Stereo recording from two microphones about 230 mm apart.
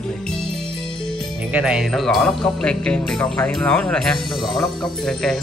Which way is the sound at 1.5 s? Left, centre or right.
Centre.